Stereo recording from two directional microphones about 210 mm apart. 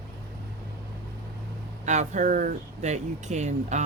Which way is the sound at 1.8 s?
35° right (ahead or behind).